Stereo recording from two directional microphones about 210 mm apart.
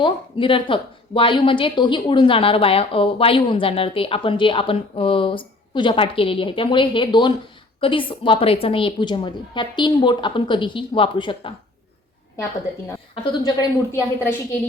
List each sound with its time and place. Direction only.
0.0 s speech: 25° left (ahead or behind)
12.9 s a woman's voice: 20° left (ahead or behind)